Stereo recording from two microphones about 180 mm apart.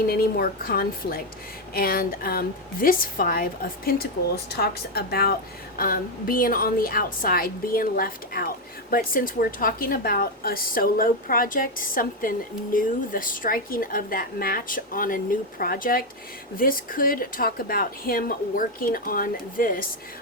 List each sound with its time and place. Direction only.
0.0 s a woman's voice: 55° left (ahead or behind)